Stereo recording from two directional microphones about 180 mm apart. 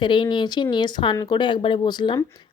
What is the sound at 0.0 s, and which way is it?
Speech, 25° left (ahead or behind).